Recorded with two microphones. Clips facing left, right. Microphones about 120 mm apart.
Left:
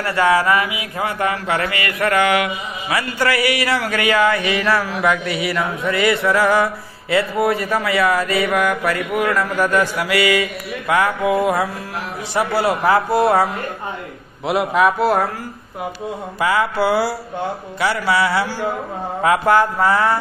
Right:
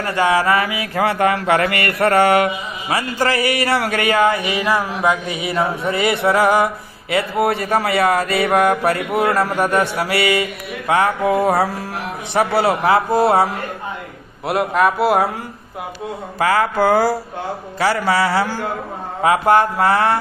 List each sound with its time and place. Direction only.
0.0 s a sound: 20° right (ahead or behind)
0.9 s speech: 70° right (ahead or behind)
1.5 s mantra: 55° right (ahead or behind)
2.0 s a sound: 40° right (ahead or behind)
3.8 s a man's voice: 30° right (ahead or behind)
4.3 s mantra: 15° right (ahead or behind)
6.2 s a man's voice: 20° right (ahead or behind)
14.4 s speech: centre (ahead or behind)
16.3 s music: 45° right (ahead or behind)
17.7 s a sound: 40° right (ahead or behind)
19.4 s mantra: 60° right (ahead or behind)